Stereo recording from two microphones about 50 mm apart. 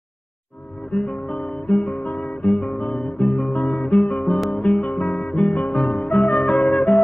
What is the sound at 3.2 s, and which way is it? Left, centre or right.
Music, left.